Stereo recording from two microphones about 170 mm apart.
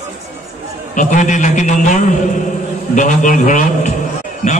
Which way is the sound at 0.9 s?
50° left (ahead or behind).